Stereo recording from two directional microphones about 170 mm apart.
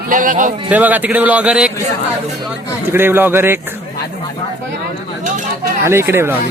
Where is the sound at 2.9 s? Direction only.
15° right (ahead or behind).